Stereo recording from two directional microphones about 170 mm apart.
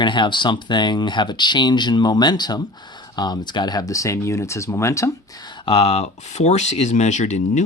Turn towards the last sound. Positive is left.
turn(degrees=45)  # may be behind; listen again after turning